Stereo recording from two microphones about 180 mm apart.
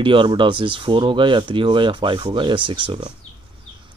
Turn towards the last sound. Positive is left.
turn(degrees=-25)  # may be behind; listen again after turning